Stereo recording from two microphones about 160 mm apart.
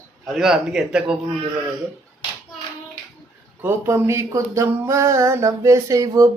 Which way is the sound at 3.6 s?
15° right (ahead or behind).